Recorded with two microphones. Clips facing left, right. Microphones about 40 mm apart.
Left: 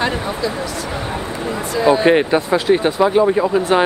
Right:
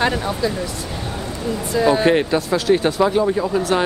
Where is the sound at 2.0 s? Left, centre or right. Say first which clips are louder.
Left 3 dB; centre.